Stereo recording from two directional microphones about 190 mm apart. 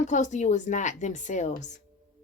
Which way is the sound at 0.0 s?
40° left (ahead or behind).